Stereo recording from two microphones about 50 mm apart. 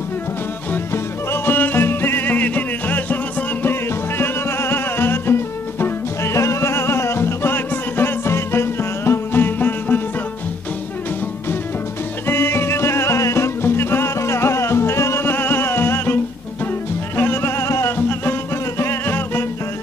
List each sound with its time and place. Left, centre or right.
0.9 s music: left
4.2 s music: left
6.3 s music: left
12.3 s music: left
14.1 s music: left
15.2 s music: left
17.2 s music: left
17.9 s music: left